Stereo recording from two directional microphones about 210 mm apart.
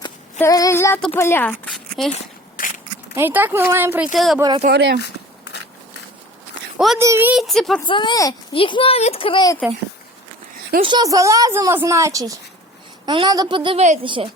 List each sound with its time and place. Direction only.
0.3 s speech: 15° left (ahead or behind)
2.1 s a sound: 40° left (ahead or behind)
3.2 s a woman's voice: 10° right (ahead or behind)
4.4 s a woman's voice: 20° right (ahead or behind)
4.7 s speech: 50° right (ahead or behind)
6.7 s a child's voice: centre (ahead or behind)
7.9 s speech: 20° left (ahead or behind)
10.8 s a woman's voice: 20° right (ahead or behind)